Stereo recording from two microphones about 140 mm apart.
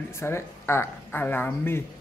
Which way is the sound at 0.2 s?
20° left (ahead or behind).